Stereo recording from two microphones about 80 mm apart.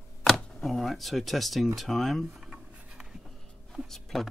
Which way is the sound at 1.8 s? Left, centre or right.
Centre.